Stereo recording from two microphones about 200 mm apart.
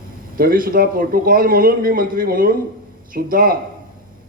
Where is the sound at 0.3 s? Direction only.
45° right (ahead or behind).